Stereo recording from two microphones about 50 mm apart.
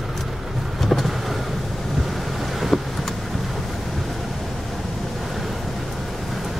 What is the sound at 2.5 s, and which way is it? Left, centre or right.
Vehicle, centre.